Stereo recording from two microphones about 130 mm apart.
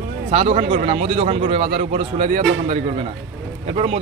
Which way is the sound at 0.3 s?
45° right (ahead or behind).